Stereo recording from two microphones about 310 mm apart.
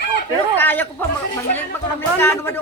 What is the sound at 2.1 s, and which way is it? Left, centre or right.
Speech, centre.